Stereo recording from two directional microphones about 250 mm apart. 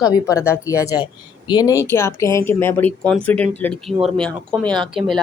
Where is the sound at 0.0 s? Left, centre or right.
Centre.